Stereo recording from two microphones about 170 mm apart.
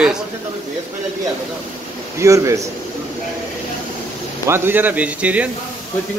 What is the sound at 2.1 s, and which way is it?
Speech, 20° right (ahead or behind).